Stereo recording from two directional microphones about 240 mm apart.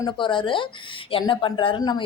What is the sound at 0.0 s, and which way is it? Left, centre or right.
Speech, centre.